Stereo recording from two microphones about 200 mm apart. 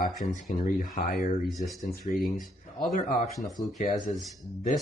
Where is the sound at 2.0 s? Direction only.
35° left (ahead or behind).